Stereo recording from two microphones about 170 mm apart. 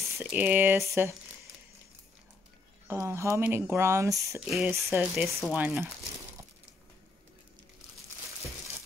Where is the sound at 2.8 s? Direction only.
15° right (ahead or behind).